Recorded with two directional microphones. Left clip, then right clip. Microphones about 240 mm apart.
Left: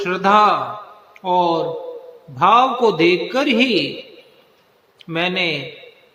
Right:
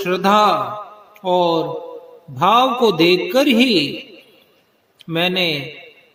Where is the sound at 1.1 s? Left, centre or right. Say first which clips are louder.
Right 1 dB; right.